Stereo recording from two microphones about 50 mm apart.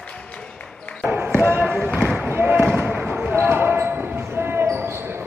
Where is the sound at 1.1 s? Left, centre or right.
Right.